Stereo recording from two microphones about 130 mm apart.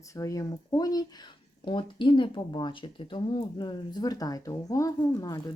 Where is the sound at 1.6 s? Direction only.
40° left (ahead or behind).